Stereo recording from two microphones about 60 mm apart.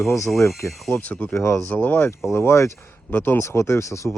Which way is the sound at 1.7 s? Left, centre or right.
Left.